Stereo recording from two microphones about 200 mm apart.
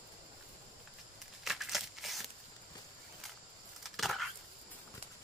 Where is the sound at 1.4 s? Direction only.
Centre (ahead or behind).